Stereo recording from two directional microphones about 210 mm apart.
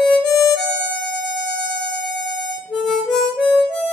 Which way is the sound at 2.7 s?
Centre (ahead or behind).